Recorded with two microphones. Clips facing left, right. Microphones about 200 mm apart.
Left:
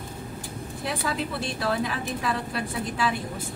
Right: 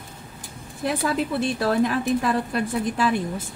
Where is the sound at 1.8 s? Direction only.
45° right (ahead or behind).